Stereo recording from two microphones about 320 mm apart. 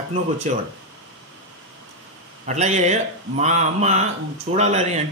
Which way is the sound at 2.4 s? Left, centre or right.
Right.